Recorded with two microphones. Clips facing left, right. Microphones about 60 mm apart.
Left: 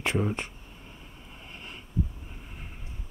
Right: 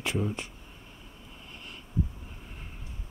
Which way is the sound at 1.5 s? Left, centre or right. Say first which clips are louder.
Left 2 dB; left.